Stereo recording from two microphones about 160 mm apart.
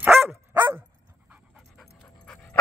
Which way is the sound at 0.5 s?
10° right (ahead or behind).